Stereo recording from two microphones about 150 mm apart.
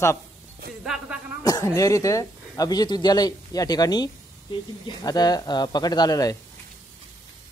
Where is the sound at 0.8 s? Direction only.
5° right (ahead or behind).